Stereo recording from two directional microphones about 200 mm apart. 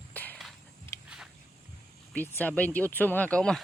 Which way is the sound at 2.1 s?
10° left (ahead or behind).